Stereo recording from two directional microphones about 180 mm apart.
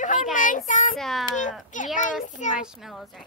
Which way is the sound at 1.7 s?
45° left (ahead or behind).